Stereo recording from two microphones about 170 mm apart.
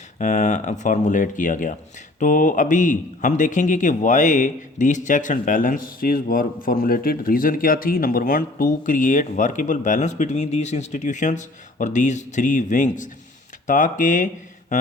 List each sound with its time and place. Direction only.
0.2 s speech: 45° left (ahead or behind)